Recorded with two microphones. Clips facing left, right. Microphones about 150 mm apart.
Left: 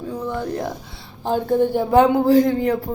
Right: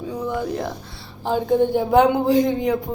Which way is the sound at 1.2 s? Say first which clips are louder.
Left 1 dB; 10° right (ahead or behind).